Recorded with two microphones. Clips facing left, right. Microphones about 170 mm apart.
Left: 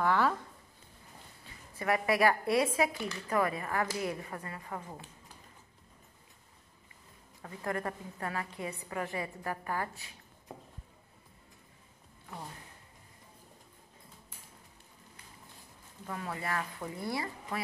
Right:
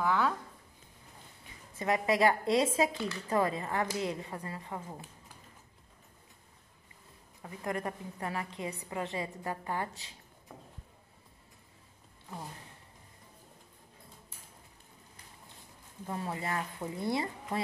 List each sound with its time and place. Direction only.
0.0 s a sound: centre (ahead or behind)
1.4 s a woman's voice: 20° right (ahead or behind)
7.4 s a woman's voice: 20° right (ahead or behind)
16.1 s a woman's voice: 25° right (ahead or behind)